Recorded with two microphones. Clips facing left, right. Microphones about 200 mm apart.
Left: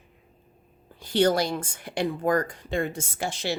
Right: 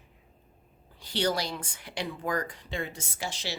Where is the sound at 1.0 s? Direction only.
50° left (ahead or behind).